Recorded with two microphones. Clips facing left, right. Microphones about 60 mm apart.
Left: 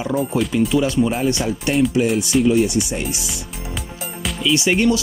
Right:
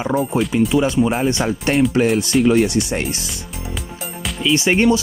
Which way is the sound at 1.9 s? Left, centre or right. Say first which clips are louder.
Right 2 dB; right.